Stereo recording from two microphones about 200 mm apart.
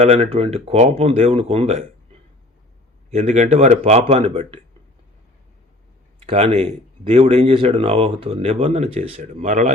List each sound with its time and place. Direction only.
0.0 s speech: 30° right (ahead or behind)
3.1 s speech: 35° right (ahead or behind)
6.1 s speech: 30° right (ahead or behind)